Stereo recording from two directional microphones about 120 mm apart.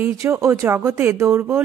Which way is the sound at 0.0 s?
20° right (ahead or behind).